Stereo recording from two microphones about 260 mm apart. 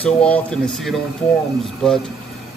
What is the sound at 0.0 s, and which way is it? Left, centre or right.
Speech, centre.